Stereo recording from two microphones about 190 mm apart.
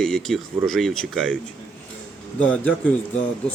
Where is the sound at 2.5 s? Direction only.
5° left (ahead or behind).